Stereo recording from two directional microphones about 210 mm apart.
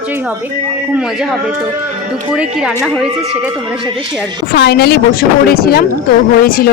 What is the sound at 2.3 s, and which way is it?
Speech, 5° right (ahead or behind).